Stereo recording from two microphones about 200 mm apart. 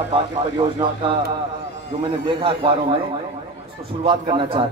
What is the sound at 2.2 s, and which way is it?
A man's voice, 25° right (ahead or behind).